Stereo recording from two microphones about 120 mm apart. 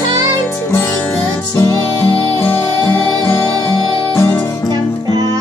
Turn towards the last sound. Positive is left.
turn(degrees=20)  # may be behind; listen again after turning